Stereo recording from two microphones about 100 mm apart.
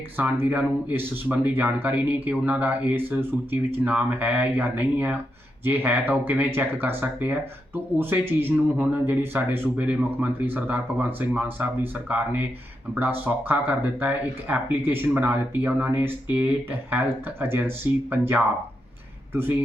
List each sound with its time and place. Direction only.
0.2 s speech: 20° right (ahead or behind)